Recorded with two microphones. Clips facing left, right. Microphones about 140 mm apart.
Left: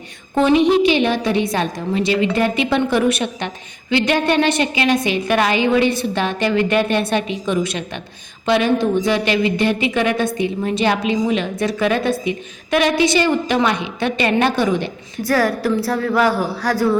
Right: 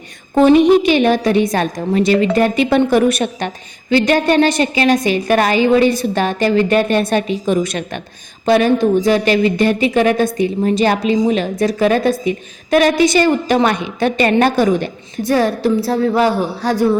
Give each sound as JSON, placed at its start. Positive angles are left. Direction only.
{"t": 0.3, "sound": "a woman's voice", "side_deg": -45}
{"t": 15.2, "sound": "a woman's voice", "side_deg": -25}